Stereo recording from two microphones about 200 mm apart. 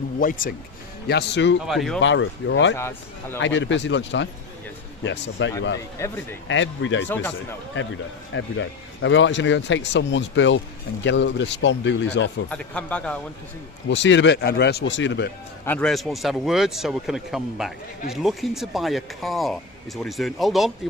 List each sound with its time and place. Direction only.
0.2 s speech: 45° left (ahead or behind)
1.0 s speech: 60° left (ahead or behind)
1.6 s speech: centre (ahead or behind)
2.0 s speech: 65° left (ahead or behind)
2.7 s a man's voice: 10° left (ahead or behind)
3.3 s speech: 65° left (ahead or behind)
5.4 s speech: 70° left (ahead or behind)
6.0 s a man's voice: 15° left (ahead or behind)
6.5 s speech: 70° left (ahead or behind)
12.5 s a man's voice: 5° left (ahead or behind)
13.8 s speech: 65° left (ahead or behind)
15.6 s speech: 5° left (ahead or behind)